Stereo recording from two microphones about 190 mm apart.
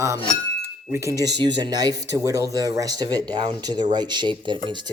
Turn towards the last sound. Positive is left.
turn(degrees=-25)  # may be behind; listen again after turning